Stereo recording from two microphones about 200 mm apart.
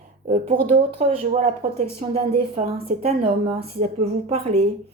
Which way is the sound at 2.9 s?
40° right (ahead or behind).